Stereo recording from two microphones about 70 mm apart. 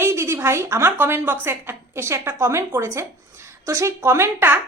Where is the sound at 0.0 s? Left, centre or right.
Right.